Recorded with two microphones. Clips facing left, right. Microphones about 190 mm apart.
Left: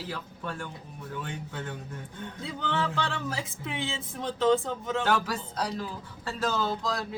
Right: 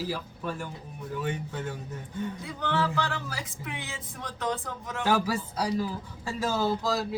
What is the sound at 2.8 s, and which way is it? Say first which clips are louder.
Speech: right 1 dB; 25° left (ahead or behind).